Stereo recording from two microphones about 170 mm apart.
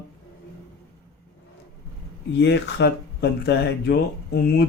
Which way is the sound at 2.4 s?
90° left.